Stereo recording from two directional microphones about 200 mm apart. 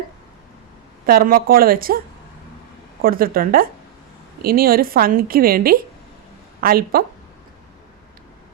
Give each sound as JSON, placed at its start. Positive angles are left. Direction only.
{"t": 1.0, "sound": "a woman's voice", "side_deg": -45}
{"t": 3.0, "sound": "a woman's voice", "side_deg": -45}